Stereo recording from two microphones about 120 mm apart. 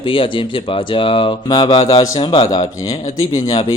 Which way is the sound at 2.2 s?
45° left (ahead or behind).